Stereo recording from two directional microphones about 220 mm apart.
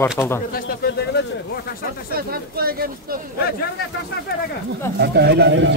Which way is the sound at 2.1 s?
45° right (ahead or behind).